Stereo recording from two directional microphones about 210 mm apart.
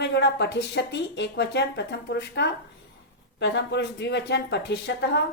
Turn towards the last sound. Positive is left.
turn(degrees=55)  # may be behind; listen again after turning